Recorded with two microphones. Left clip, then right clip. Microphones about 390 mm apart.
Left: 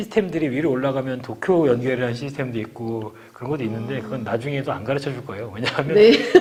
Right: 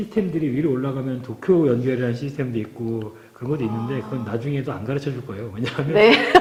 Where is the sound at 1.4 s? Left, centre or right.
Left.